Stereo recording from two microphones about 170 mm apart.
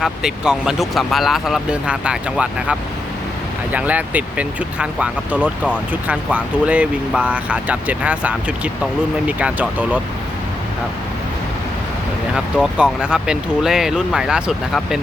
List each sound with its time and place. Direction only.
0.0 s speech: 5° right (ahead or behind)
12.5 s speech: 5° right (ahead or behind)